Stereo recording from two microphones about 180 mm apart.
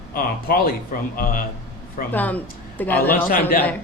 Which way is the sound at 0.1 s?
55° left (ahead or behind).